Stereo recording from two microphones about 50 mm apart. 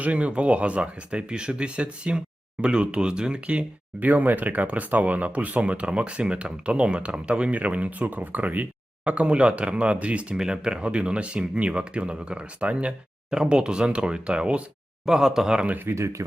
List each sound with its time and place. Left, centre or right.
0.0 s speech: right
4.0 s speech: right
9.0 s speech: right
10.3 s speech: centre
15.0 s speech: centre
15.5 s speech: right
16.0 s speech: right